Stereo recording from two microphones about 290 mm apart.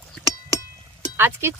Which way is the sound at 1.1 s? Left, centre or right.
Centre.